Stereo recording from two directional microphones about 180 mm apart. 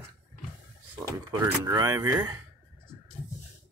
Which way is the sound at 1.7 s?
20° right (ahead or behind).